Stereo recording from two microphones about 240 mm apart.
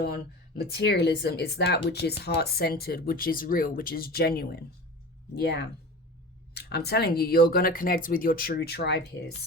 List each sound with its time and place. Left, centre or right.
0.0 s speech: left